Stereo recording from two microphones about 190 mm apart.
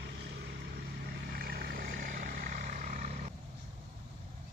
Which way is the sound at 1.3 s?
50° right (ahead or behind).